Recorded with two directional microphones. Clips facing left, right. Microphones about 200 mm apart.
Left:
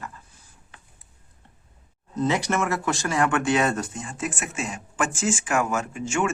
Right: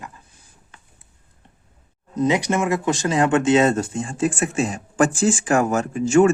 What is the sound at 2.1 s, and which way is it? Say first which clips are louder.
Speech: right 4 dB; 15° right (ahead or behind).